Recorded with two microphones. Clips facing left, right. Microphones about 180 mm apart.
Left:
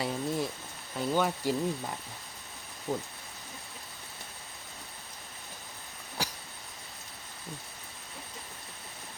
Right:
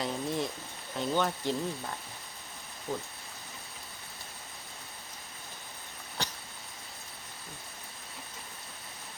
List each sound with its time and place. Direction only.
0.0 s speech: centre (ahead or behind)
2.9 s speech: 20° left (ahead or behind)
6.2 s a sound: 10° left (ahead or behind)